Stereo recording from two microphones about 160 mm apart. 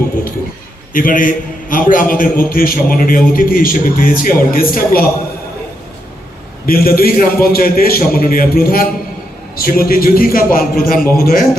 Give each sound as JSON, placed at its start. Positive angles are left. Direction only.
{"t": 0.9, "sound": "a man's voice", "side_deg": 60}
{"t": 6.7, "sound": "a man's voice", "side_deg": 65}